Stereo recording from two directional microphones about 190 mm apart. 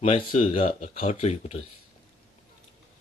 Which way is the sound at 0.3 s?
30° left (ahead or behind).